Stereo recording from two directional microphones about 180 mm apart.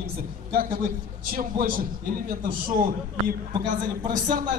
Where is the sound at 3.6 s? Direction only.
45° right (ahead or behind).